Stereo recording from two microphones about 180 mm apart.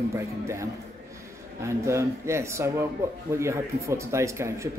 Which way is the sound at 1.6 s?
15° right (ahead or behind).